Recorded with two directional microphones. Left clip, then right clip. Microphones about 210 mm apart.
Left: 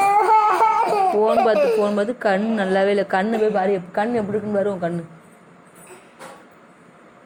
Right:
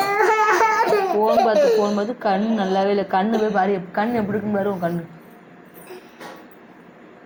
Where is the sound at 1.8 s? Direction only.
45° left (ahead or behind).